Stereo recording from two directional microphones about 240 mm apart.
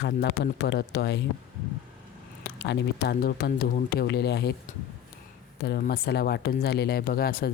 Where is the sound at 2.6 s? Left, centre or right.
Left.